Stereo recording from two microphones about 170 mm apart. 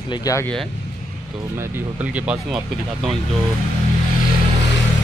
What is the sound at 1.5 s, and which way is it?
Speech, 10° right (ahead or behind).